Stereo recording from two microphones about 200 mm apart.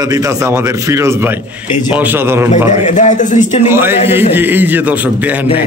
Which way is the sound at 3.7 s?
10° right (ahead or behind).